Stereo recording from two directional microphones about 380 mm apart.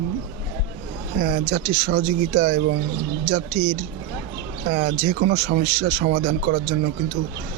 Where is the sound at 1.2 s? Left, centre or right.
Right.